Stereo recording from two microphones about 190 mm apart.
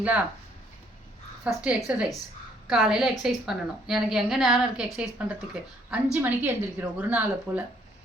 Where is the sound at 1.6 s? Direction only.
5° right (ahead or behind).